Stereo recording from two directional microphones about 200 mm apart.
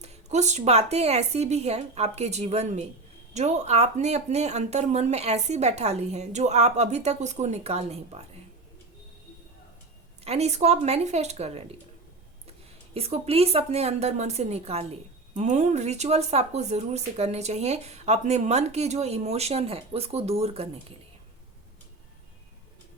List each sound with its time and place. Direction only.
0.0 s speech: 35° right (ahead or behind)
10.2 s speech: 35° right (ahead or behind)
12.9 s speech: 30° right (ahead or behind)